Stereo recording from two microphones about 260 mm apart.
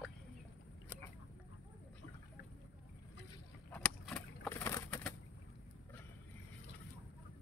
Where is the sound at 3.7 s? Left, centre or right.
Centre.